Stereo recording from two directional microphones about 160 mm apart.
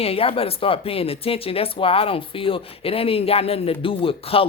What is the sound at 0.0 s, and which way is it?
Speech, 35° left (ahead or behind).